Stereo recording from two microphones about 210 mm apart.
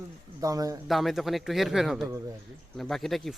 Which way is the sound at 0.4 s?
15° right (ahead or behind).